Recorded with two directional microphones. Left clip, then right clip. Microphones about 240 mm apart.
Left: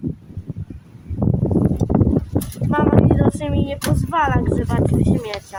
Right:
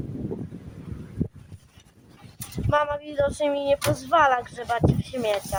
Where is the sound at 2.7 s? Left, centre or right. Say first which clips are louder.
Left 6 dB; centre.